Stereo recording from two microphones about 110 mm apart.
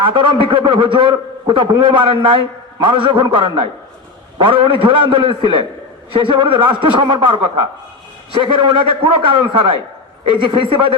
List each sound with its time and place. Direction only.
0.0 s a man's voice: 45° right (ahead or behind)